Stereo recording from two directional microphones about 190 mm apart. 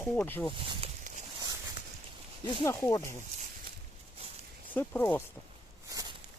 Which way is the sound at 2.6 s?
15° left (ahead or behind).